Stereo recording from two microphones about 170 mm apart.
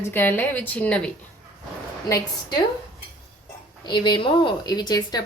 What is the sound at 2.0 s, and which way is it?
Speech, 20° left (ahead or behind).